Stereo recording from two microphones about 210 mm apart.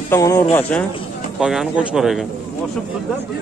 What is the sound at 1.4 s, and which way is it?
Speech, centre (ahead or behind).